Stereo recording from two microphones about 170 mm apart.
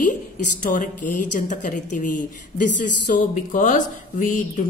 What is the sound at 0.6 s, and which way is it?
A woman's voice, 50° left (ahead or behind).